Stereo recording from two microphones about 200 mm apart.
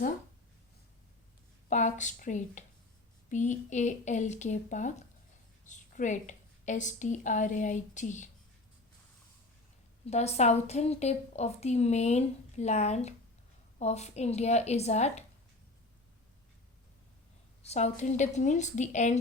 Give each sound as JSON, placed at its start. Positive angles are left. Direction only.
{"t": 1.7, "sound": "a woman's voice", "side_deg": 40}
{"t": 10.1, "sound": "a woman's voice", "side_deg": 35}
{"t": 17.6, "sound": "a woman's voice", "side_deg": 30}